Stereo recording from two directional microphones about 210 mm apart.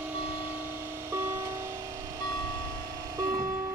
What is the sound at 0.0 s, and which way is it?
Music, 10° right (ahead or behind).